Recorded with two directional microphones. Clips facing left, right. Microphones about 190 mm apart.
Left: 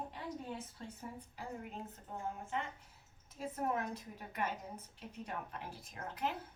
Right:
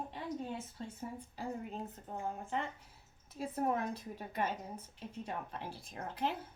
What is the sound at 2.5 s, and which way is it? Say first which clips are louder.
A woman's voice: right 3 dB; 35° right (ahead or behind).